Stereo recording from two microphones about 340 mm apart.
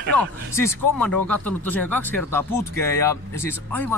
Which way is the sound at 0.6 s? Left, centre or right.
Centre.